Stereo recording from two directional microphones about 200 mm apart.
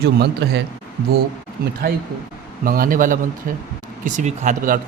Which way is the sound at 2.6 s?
45° right (ahead or behind).